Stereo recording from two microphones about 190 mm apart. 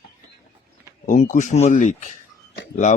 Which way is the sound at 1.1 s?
40° left (ahead or behind).